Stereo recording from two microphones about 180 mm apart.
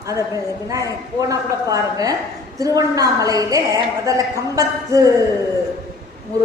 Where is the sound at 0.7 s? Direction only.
20° right (ahead or behind).